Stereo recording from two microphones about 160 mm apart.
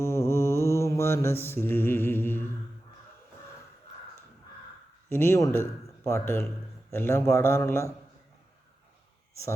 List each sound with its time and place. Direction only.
0.0 s mantra: 15° left (ahead or behind)
5.0 s a man's voice: 15° left (ahead or behind)